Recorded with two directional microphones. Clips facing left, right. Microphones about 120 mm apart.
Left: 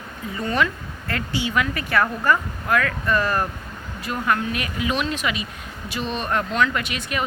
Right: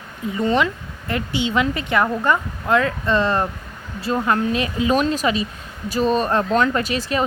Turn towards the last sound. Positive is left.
turn(degrees=-35)  # may be behind; listen again after turning